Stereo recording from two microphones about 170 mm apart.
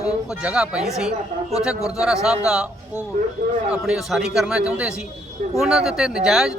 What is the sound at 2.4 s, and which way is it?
Speech, 5° right (ahead or behind).